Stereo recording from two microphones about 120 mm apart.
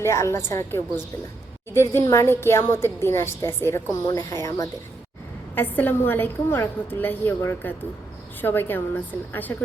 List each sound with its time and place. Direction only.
0.0 s a woman's voice: 20° left (ahead or behind)
5.5 s a woman's voice: 15° left (ahead or behind)